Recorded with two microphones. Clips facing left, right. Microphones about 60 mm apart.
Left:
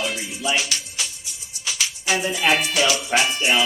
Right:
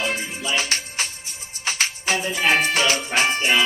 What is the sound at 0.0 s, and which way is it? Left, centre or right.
Music, right.